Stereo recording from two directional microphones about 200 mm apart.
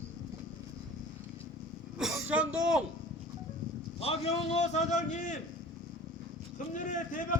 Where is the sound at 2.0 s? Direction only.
5° right (ahead or behind).